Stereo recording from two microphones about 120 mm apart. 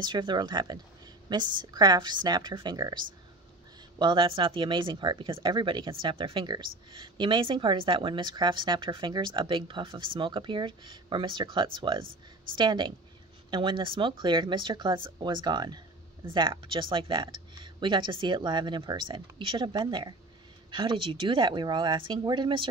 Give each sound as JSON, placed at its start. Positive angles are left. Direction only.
{"t": 0.0, "sound": "speech", "side_deg": -40}
{"t": 4.0, "sound": "speech", "side_deg": -45}